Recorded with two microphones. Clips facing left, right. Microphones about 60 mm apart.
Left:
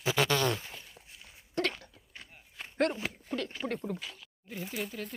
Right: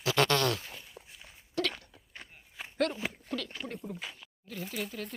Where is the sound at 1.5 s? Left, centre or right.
Left.